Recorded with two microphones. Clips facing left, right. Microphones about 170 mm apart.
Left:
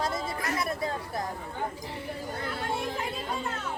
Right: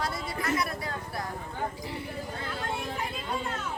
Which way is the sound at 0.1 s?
25° left (ahead or behind).